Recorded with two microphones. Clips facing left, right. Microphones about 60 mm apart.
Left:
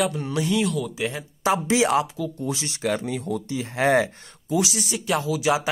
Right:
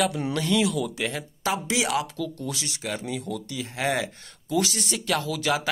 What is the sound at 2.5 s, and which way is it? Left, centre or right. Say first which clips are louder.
Speech: left 6 dB; left.